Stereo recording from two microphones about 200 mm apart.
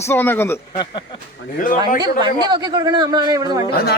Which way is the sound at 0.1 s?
10° left (ahead or behind).